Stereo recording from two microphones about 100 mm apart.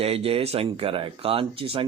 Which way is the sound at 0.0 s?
75° right (ahead or behind).